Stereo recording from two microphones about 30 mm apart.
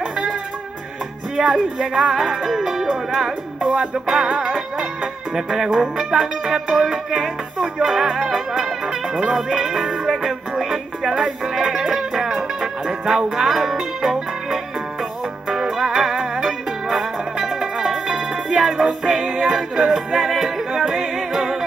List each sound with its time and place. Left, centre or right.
1.3 s speech: centre
2.1 s music: centre
3.7 s music: right
4.2 s music: centre
10.6 s music: centre
15.8 s music: centre